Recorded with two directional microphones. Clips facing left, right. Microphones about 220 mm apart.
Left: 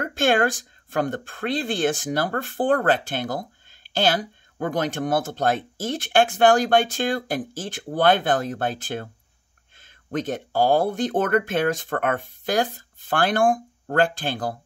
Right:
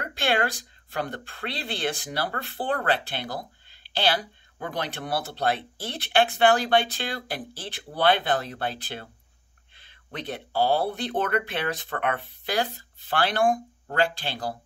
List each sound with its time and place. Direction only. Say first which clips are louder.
0.0 s speech: left 6 dB; 50° left (ahead or behind)